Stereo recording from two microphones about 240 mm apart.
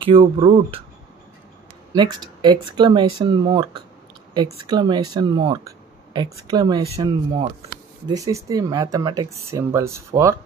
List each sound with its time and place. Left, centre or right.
0.0 s speech: right
2.0 s speech: centre